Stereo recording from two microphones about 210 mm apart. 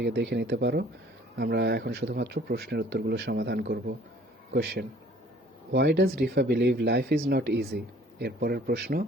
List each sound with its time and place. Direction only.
0.0 s speech: 55° right (ahead or behind)